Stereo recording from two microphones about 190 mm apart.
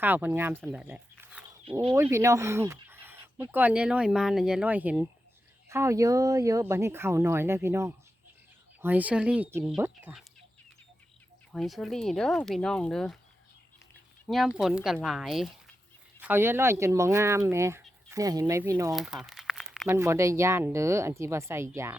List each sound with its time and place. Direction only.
0.0 s speech: 10° right (ahead or behind)
0.6 s a sound: 5° right (ahead or behind)
2.0 s speech: 15° right (ahead or behind)
11.5 s speech: centre (ahead or behind)
14.3 s speech: centre (ahead or behind)
16.2 s speech: 10° right (ahead or behind)
18.9 s crumpling: centre (ahead or behind)
20.0 s speech: 15° right (ahead or behind)